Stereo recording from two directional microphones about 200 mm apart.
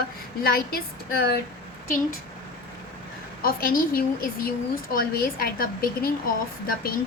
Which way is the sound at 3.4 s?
45° left (ahead or behind).